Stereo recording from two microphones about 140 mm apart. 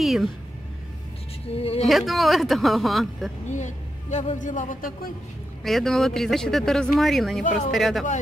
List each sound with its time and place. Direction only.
0.0 s speech: centre (ahead or behind)
1.5 s a woman's voice: 45° left (ahead or behind)
1.9 s speech: centre (ahead or behind)
3.5 s speech: 60° left (ahead or behind); by 5.1 s 80° left
5.6 s speech: centre (ahead or behind)